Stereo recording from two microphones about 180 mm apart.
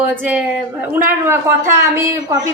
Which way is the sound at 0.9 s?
10° right (ahead or behind).